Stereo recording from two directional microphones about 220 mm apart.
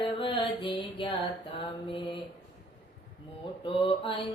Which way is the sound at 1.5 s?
25° left (ahead or behind).